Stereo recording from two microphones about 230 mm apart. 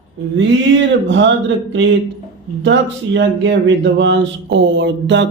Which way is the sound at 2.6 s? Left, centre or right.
Right.